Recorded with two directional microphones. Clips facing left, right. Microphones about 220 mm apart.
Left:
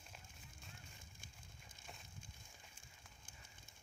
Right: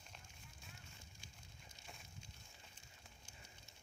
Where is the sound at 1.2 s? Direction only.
50° left (ahead or behind).